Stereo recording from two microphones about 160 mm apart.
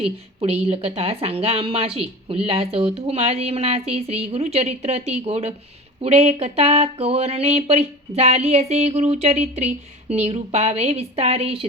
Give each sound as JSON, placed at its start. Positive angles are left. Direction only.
{"t": 0.0, "sound": "a woman's voice", "side_deg": -35}